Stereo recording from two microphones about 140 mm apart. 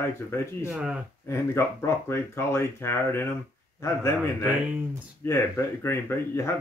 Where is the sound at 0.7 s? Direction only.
10° right (ahead or behind).